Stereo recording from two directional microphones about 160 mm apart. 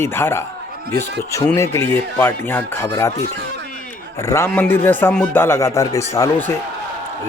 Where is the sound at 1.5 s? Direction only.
15° left (ahead or behind).